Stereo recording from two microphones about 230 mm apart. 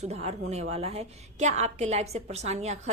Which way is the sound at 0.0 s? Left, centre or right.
Right.